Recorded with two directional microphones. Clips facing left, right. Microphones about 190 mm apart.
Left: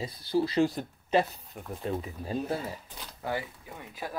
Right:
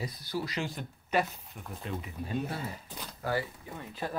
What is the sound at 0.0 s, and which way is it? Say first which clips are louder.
Speech: left 7 dB; 30° left (ahead or behind).